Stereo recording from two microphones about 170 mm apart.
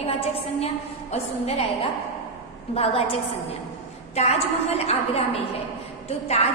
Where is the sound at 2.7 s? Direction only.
35° left (ahead or behind).